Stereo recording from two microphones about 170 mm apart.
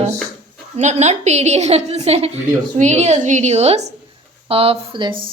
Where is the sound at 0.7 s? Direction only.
40° right (ahead or behind).